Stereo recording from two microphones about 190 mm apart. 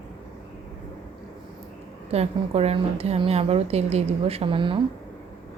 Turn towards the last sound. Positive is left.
turn(degrees=-30)  # may be behind; listen again after turning